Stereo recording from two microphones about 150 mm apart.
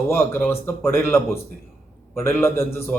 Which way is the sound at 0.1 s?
15° left (ahead or behind).